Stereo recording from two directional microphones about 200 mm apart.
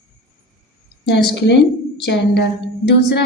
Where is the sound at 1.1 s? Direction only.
55° left (ahead or behind).